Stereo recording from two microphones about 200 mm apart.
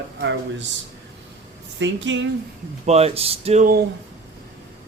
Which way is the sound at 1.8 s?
65° right (ahead or behind).